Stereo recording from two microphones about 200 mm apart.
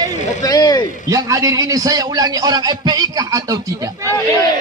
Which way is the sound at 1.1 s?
15° right (ahead or behind).